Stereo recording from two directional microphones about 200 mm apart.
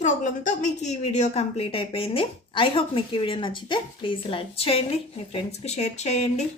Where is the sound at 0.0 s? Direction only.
40° left (ahead or behind).